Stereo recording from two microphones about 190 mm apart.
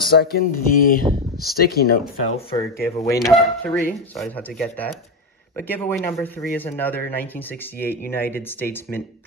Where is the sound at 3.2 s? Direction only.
Centre (ahead or behind).